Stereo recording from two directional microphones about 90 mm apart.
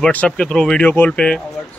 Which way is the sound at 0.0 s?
15° left (ahead or behind).